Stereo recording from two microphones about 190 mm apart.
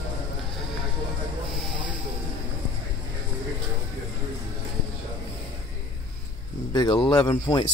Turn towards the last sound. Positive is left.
turn(degrees=25)  # may be behind; listen again after turning